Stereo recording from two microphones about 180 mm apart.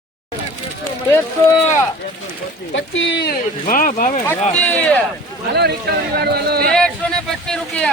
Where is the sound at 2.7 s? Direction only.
90° left; by 4.2 s 50° left (ahead or behind).